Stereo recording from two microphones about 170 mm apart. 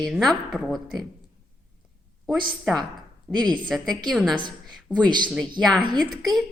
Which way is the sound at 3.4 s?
25° right (ahead or behind).